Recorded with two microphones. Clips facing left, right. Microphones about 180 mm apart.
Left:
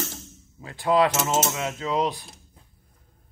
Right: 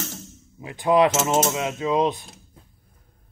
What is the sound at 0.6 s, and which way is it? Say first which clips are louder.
Speech: right 3 dB; 20° right (ahead or behind).